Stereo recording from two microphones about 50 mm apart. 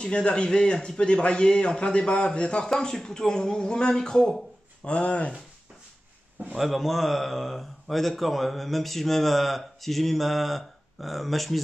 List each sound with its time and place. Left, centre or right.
0.0 s a man's voice: centre
6.5 s speech: centre